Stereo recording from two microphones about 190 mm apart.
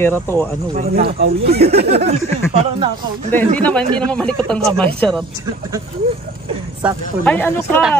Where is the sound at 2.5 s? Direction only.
25° right (ahead or behind).